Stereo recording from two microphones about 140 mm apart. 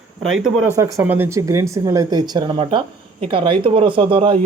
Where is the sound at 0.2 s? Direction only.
5° right (ahead or behind).